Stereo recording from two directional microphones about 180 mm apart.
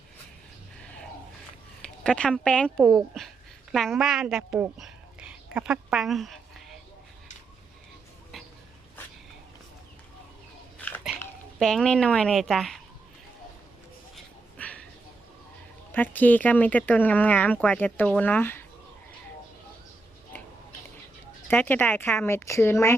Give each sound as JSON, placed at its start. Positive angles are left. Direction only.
{"t": 1.8, "sound": "speech", "side_deg": 5}
{"t": 10.8, "sound": "biting", "side_deg": 10}
{"t": 11.6, "sound": "speech", "side_deg": 5}
{"t": 14.6, "sound": "a sound", "side_deg": 5}
{"t": 15.9, "sound": "speech", "side_deg": 10}
{"t": 21.4, "sound": "speech", "side_deg": 10}